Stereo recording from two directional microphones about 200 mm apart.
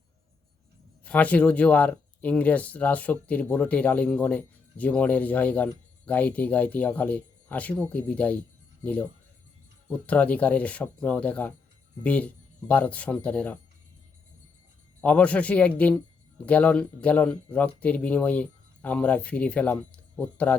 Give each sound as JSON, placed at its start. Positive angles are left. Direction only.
{"t": 1.0, "sound": "speech", "side_deg": 5}
{"t": 10.1, "sound": "speech", "side_deg": 5}
{"t": 15.0, "sound": "speech", "side_deg": 5}